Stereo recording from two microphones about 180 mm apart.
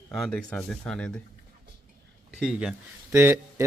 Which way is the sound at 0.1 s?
5° left (ahead or behind).